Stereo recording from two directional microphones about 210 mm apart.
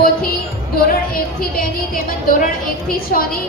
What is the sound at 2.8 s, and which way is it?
Speech, 45° left (ahead or behind).